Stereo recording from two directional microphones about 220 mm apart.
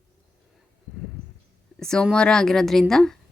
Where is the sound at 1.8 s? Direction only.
5° left (ahead or behind).